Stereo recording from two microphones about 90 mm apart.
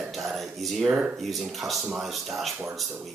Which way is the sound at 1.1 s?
Centre (ahead or behind).